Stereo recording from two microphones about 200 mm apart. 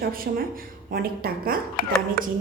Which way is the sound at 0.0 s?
45° right (ahead or behind).